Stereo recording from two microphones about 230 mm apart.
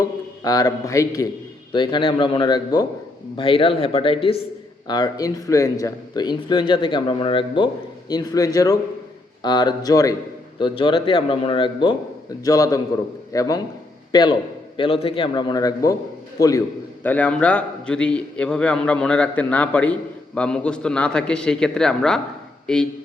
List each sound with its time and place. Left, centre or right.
0.0 s a man's voice: centre